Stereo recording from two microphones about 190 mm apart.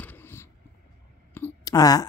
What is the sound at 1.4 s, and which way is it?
Clicking, 15° left (ahead or behind).